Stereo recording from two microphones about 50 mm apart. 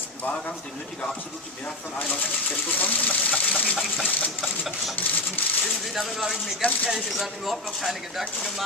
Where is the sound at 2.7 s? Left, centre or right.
Left.